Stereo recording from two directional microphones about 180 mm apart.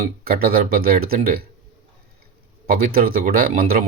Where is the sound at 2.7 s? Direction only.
55° right (ahead or behind).